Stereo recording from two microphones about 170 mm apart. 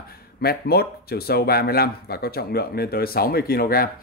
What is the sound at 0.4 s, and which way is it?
Speech, 70° left (ahead or behind).